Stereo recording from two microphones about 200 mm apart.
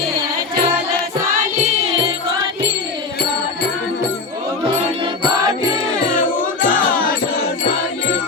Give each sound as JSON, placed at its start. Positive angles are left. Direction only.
{"t": 6.1, "sound": "music", "side_deg": 45}